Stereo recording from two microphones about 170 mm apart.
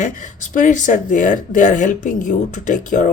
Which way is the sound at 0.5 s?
50° left (ahead or behind).